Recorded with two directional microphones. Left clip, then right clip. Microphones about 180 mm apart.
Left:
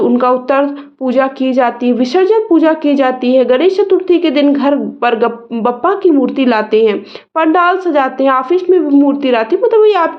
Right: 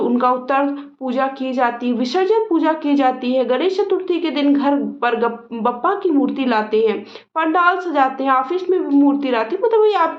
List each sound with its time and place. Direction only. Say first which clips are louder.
0.0 s a woman's voice: left 6 dB; 35° left (ahead or behind)